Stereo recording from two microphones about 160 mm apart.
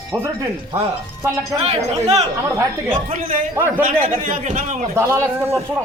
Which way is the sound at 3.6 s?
15° right (ahead or behind).